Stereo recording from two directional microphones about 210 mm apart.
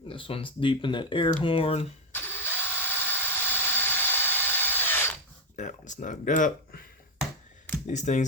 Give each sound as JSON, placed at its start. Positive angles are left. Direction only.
{"t": 0.1, "sound": "speech", "side_deg": 25}
{"t": 2.1, "sound": "drill", "side_deg": 10}
{"t": 3.1, "sound": "tools", "side_deg": 10}
{"t": 5.5, "sound": "speech", "side_deg": 35}
{"t": 7.9, "sound": "speech", "side_deg": 35}